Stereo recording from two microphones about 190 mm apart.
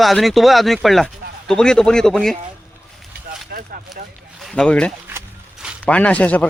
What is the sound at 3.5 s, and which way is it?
Speech, 50° right (ahead or behind).